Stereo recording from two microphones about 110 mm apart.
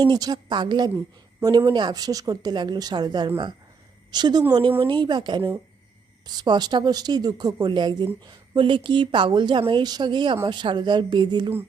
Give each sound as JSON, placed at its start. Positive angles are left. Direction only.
{"t": 0.0, "sound": "speech", "side_deg": -40}
{"t": 3.2, "sound": "speech", "side_deg": -50}
{"t": 4.1, "sound": "speech", "side_deg": -40}